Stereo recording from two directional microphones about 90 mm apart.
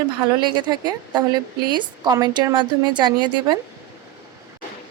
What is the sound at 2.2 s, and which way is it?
A woman's voice, 50° right (ahead or behind).